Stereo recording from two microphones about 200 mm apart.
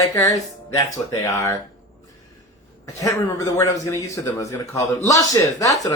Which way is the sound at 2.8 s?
15° left (ahead or behind).